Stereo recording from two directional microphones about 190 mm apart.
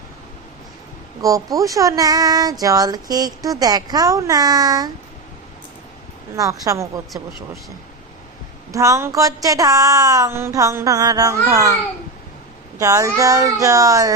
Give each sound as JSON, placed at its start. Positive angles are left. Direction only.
{"t": 1.2, "sound": "speech", "side_deg": -15}
{"t": 6.3, "sound": "speech", "side_deg": -15}
{"t": 8.7, "sound": "speech", "side_deg": -15}
{"t": 12.8, "sound": "speech", "side_deg": -15}